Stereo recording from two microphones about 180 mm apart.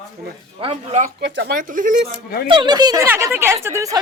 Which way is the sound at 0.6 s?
35° right (ahead or behind).